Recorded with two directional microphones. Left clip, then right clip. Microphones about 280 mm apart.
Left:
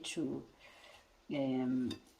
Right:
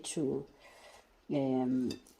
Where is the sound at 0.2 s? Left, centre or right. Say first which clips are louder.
Right 5 dB; right.